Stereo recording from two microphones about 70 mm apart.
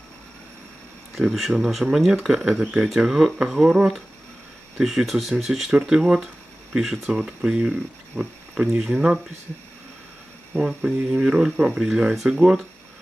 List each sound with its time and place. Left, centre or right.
1.1 s speech: centre
10.5 s speech: centre